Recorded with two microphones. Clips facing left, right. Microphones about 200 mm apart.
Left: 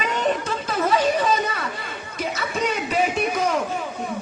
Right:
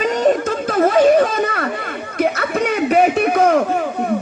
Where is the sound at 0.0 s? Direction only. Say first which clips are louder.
Right 8 dB; 40° right (ahead or behind).